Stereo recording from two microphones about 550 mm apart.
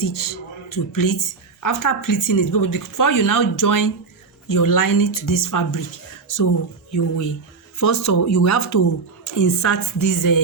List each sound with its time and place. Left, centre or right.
0.0 s speech: left
7.8 s speech: left